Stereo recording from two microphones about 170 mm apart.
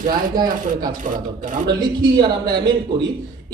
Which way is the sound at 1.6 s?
25° right (ahead or behind).